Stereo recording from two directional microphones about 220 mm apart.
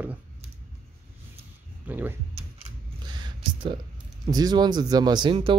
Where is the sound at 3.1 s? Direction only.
20° right (ahead or behind).